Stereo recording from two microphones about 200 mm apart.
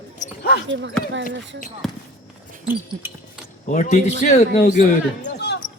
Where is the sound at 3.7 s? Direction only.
35° left (ahead or behind).